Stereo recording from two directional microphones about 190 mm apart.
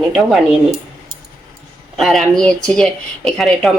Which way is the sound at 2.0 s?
Centre (ahead or behind).